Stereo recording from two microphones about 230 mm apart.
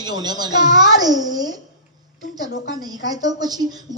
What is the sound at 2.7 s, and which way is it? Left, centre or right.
A man's voice, centre.